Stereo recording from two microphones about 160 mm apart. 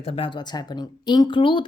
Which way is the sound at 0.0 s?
35° left (ahead or behind).